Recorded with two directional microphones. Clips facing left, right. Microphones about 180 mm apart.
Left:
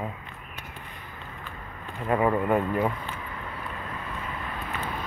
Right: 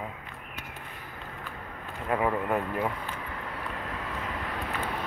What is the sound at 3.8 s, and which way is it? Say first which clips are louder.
Vehicle: right 1 dB; 85° right.